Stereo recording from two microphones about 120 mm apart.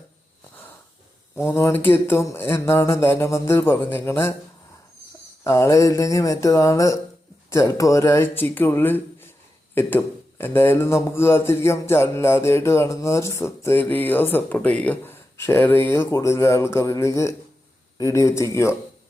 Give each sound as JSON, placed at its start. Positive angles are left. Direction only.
{"t": 1.4, "sound": "a man's voice", "side_deg": 20}
{"t": 5.4, "sound": "a man's voice", "side_deg": 25}